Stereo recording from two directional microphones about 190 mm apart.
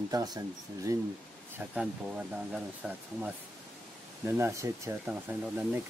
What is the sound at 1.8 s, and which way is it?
Speech, 5° right (ahead or behind).